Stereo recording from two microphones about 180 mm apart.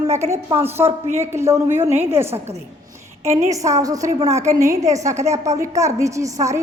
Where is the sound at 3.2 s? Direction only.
40° right (ahead or behind).